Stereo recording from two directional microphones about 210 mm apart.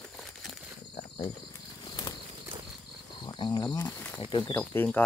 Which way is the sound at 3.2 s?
20° left (ahead or behind).